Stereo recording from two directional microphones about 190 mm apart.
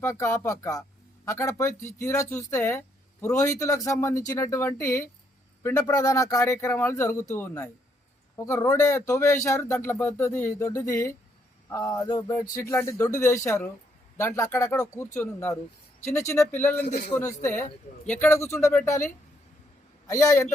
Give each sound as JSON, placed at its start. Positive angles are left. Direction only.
{"t": 0.0, "sound": "speech", "side_deg": 15}